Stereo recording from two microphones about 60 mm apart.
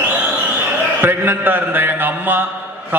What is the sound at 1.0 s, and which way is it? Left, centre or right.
A man's voice, right.